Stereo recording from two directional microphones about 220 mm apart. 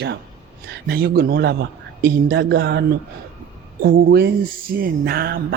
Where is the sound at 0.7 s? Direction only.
45° right (ahead or behind).